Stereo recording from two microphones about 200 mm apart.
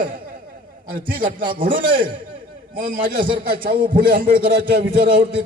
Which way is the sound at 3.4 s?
45° right (ahead or behind).